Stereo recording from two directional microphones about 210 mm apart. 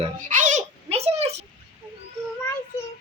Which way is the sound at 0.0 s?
35° right (ahead or behind).